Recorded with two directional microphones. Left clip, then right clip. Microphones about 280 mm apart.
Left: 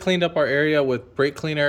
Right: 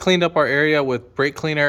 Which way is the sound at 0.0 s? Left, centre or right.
Centre.